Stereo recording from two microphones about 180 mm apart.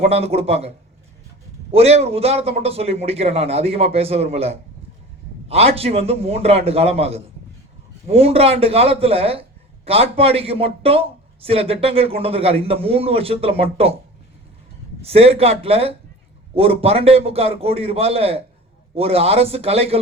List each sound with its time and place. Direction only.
0.0 s a man's voice: 35° right (ahead or behind)
1.7 s a man's voice: 35° right (ahead or behind)
15.0 s a man's voice: 35° right (ahead or behind)